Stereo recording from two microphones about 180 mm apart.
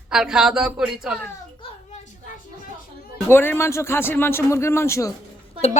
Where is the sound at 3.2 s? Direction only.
10° left (ahead or behind).